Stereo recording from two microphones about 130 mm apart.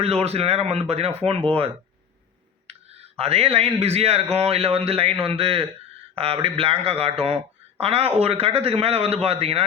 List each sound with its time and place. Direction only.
0.0 s speech: 50° right (ahead or behind)
2.7 s a sound: 50° right (ahead or behind)
3.2 s speech: 50° right (ahead or behind)